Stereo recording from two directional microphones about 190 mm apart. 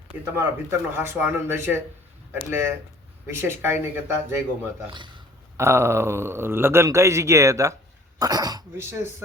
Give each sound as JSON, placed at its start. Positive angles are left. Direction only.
{"t": 0.3, "sound": "speech", "side_deg": -10}
{"t": 5.5, "sound": "speech", "side_deg": -15}